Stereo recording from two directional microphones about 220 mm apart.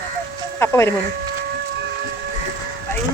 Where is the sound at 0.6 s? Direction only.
10° left (ahead or behind).